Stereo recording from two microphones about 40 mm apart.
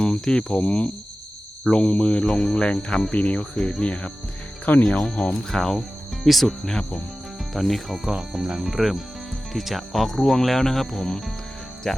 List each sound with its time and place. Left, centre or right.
0.0 s speech: left
0.6 s speech: left
2.2 s speech: centre
3.1 s speech: left
3.5 s speech: centre
3.8 s speech: left
5.5 s speech: centre